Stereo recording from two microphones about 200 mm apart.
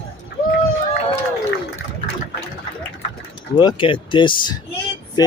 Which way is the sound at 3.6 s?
25° left (ahead or behind).